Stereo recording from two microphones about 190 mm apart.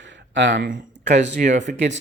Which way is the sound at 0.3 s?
70° right (ahead or behind).